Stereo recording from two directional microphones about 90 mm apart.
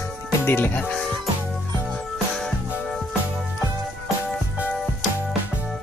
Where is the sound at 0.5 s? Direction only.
20° left (ahead or behind).